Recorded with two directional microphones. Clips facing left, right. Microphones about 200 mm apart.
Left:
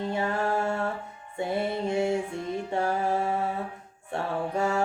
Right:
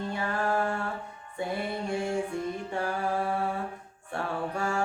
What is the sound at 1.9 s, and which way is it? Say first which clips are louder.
Music: left 2 dB; 20° left (ahead or behind).